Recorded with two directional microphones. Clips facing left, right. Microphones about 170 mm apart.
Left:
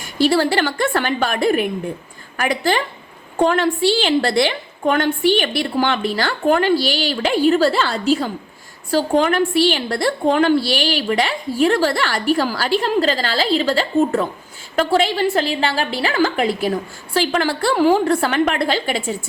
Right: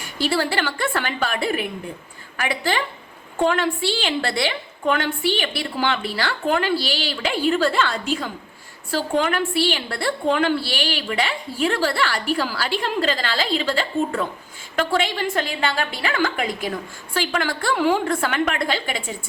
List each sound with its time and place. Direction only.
0.0 s a woman's voice: 40° left (ahead or behind)